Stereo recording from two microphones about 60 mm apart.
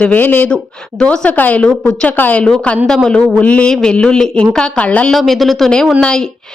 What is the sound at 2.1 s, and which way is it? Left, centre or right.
Speech, left.